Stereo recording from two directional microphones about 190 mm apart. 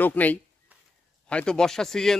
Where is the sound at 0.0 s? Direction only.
10° left (ahead or behind).